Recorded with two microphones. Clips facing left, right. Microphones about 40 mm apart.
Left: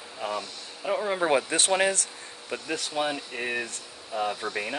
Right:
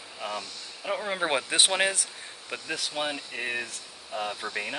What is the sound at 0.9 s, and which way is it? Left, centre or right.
Speech, centre.